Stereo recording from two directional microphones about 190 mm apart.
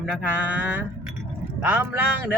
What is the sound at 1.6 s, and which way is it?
Speech, 10° right (ahead or behind).